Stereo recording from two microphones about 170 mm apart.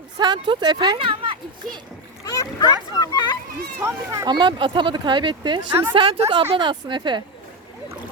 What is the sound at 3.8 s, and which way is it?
Speech, 15° right (ahead or behind).